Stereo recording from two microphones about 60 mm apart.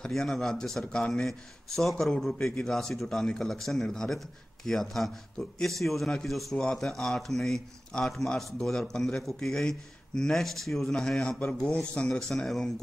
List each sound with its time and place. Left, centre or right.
0.0 s a man's voice: centre
12.1 s a man's voice: centre